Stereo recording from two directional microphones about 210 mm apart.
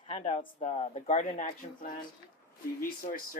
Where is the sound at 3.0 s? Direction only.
45° left (ahead or behind).